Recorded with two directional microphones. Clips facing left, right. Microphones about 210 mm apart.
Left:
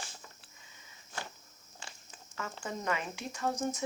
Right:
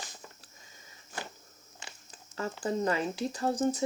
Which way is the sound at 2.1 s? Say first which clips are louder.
Right 6 dB; 35° right (ahead or behind).